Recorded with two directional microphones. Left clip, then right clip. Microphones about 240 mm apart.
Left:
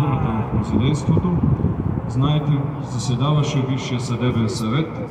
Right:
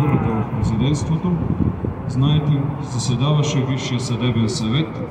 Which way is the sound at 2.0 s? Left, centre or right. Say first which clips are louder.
Right 1 dB; centre.